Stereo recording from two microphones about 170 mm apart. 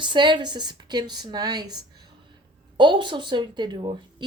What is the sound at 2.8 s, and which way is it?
Speech, 30° right (ahead or behind).